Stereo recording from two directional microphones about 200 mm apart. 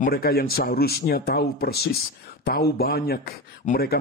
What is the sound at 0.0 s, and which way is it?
Speech, 50° left (ahead or behind).